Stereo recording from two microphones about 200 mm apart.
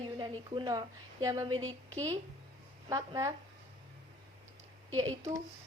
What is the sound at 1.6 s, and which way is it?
Speech, 10° left (ahead or behind).